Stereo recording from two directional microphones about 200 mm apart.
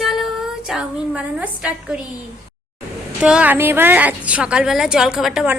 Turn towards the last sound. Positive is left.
turn(degrees=-5)  # may be behind; listen again after turning